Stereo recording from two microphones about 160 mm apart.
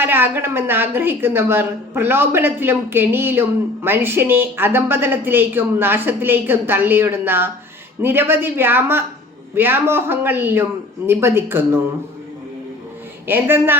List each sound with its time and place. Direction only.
0.0 s a woman's voice: 15° right (ahead or behind)
13.2 s a woman's voice: 15° right (ahead or behind)